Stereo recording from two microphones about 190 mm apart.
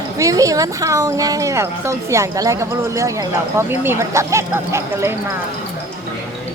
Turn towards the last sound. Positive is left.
turn(degrees=-15)  # may be behind; listen again after turning